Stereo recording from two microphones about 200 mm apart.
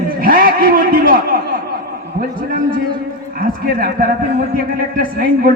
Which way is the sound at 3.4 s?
45° right (ahead or behind).